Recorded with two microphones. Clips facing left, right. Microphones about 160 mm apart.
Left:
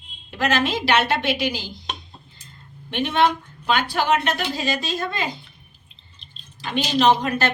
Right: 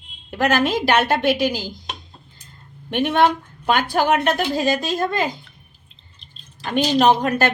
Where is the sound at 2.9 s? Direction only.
50° right (ahead or behind).